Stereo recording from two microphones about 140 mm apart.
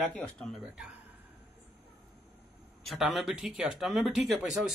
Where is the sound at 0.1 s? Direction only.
Centre (ahead or behind).